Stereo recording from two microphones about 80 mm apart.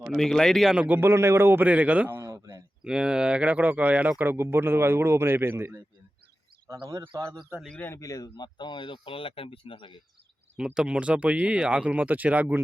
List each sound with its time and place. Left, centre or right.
0.1 s speech: centre
0.9 s a man's voice: right
1.6 s speech: centre
2.2 s a sound: right
2.8 s speech: centre
4.2 s a man's voice: right
7.9 s speech: left
10.8 s speech: centre